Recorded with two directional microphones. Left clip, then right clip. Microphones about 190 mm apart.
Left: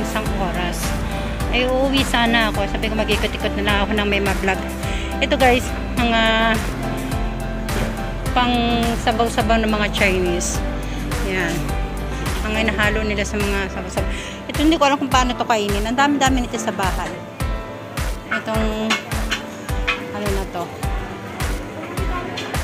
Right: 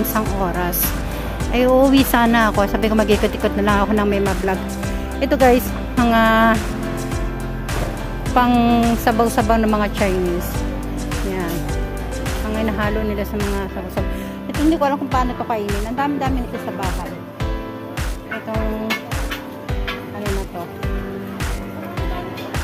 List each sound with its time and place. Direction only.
1.5 s speech: 55° right (ahead or behind); by 6.5 s 40° right (ahead or behind)
8.4 s speech: 45° right (ahead or behind)
12.5 s speech: 20° right (ahead or behind)
14.7 s speech: 15° right (ahead or behind); by 16.4 s 5° left (ahead or behind)